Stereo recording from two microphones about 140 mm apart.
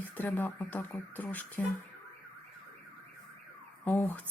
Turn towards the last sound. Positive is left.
turn(degrees=15)  # may be behind; listen again after turning